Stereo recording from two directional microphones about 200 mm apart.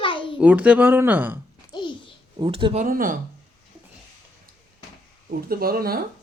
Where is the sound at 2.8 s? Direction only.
45° right (ahead or behind).